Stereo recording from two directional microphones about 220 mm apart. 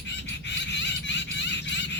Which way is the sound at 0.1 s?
55° left (ahead or behind).